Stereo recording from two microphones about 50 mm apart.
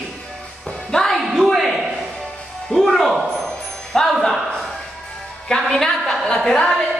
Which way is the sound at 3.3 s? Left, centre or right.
Centre.